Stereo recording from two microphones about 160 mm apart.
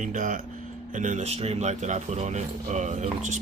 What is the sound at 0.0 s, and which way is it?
Speech, 50° right (ahead or behind).